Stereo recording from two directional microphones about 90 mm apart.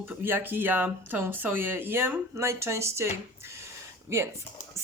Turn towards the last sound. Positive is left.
turn(degrees=-30)  # may be behind; listen again after turning